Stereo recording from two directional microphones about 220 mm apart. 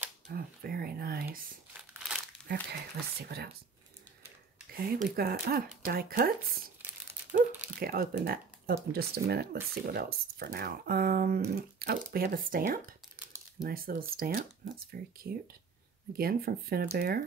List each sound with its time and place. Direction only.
0.3 s speech: 45° right (ahead or behind)
1.7 s crumpling: 5° right (ahead or behind)
2.4 s speech: 45° right (ahead or behind)
4.7 s speech: 45° right (ahead or behind)
7.8 s speech: 40° right (ahead or behind)